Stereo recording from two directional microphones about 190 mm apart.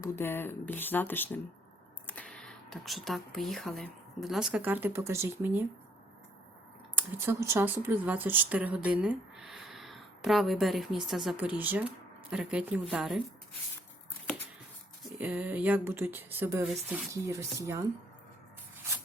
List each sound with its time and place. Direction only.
0.0 s speech: 10° left (ahead or behind); by 5.6 s 15° right (ahead or behind)
6.9 s speech: 15° right (ahead or behind)
15.2 s speech: 10° right (ahead or behind)